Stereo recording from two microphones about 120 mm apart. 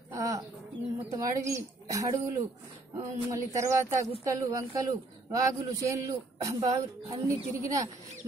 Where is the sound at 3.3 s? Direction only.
25° right (ahead or behind).